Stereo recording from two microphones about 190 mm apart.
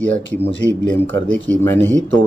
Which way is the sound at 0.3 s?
10° left (ahead or behind).